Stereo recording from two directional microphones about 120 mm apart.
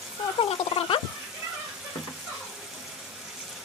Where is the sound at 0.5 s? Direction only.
50° left (ahead or behind).